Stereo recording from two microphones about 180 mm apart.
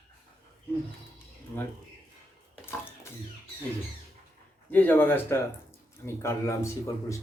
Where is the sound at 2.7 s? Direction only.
10° left (ahead or behind).